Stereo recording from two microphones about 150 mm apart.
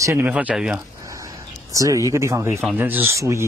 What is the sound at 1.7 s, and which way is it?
Speech, 20° right (ahead or behind).